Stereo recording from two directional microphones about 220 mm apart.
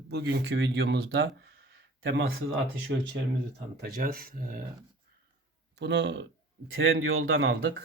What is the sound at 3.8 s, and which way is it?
Speech, 45° right (ahead or behind).